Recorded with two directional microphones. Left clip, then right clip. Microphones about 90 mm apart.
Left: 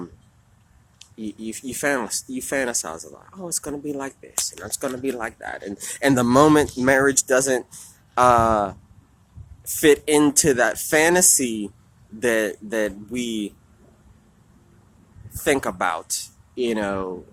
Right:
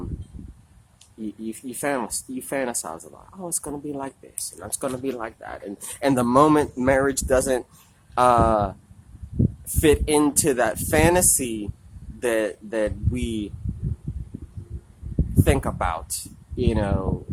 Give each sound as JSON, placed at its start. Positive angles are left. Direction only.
{"t": 0.9, "sound": "speech", "side_deg": -15}
{"t": 5.1, "sound": "speech", "side_deg": -5}
{"t": 15.4, "sound": "speech", "side_deg": -5}
{"t": 16.6, "sound": "speech", "side_deg": -15}